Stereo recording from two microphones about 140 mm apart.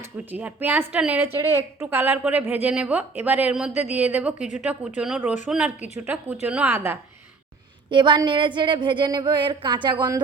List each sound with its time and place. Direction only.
0.0 s speech: 10° right (ahead or behind)
7.9 s a woman's voice: 35° right (ahead or behind)